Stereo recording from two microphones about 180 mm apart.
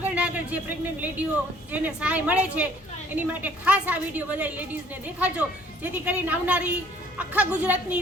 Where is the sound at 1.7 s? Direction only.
10° right (ahead or behind).